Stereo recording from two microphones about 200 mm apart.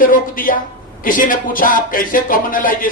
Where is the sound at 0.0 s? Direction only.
45° left (ahead or behind).